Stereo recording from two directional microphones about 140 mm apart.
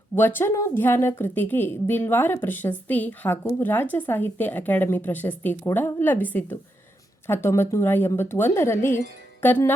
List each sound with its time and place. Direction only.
0.2 s a woman's voice: 15° left (ahead or behind)